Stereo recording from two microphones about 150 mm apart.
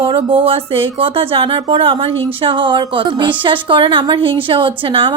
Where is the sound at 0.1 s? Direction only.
35° right (ahead or behind).